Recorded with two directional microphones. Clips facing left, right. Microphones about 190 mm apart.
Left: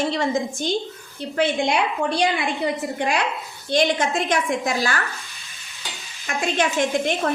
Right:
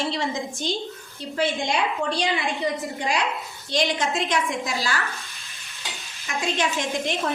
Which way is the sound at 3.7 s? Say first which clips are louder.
Left 4 dB; 55° left (ahead or behind).